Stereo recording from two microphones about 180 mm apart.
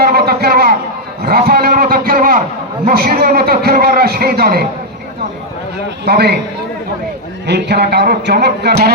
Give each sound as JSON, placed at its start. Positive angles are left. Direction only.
{"t": 0.1, "sound": "a sound", "side_deg": -60}
{"t": 2.8, "sound": "a man's voice", "side_deg": -55}
{"t": 6.1, "sound": "a man's voice", "side_deg": -65}
{"t": 7.4, "sound": "a man's voice", "side_deg": -70}